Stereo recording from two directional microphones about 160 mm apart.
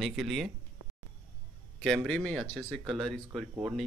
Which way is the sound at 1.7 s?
Centre (ahead or behind).